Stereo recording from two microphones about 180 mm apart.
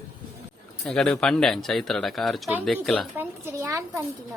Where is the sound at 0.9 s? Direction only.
5° left (ahead or behind).